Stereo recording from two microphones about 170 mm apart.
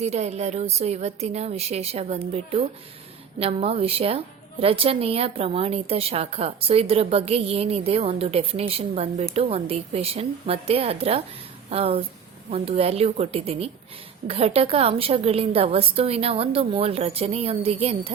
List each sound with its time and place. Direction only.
0.0 s a woman's voice: 40° right (ahead or behind)